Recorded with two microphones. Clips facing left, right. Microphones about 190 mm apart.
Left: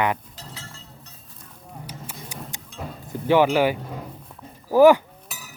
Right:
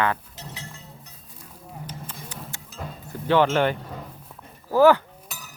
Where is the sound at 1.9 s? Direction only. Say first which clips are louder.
Even; 10° left (ahead or behind).